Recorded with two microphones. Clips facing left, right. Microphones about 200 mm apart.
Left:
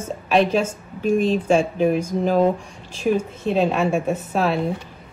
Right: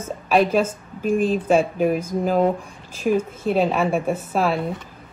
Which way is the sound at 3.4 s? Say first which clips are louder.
Left 1 dB; 5° right (ahead or behind).